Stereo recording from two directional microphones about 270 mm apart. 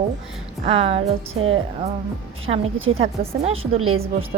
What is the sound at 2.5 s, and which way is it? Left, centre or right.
A woman's voice, right.